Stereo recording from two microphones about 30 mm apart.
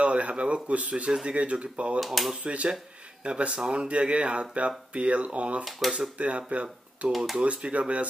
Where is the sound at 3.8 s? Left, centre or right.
Right.